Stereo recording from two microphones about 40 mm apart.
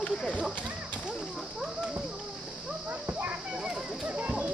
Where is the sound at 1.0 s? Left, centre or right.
Right.